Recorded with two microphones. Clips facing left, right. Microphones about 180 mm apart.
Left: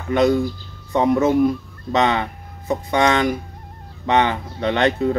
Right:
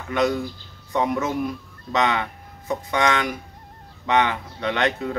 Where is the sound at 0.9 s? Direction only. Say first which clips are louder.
Left 7 dB; 30° left (ahead or behind).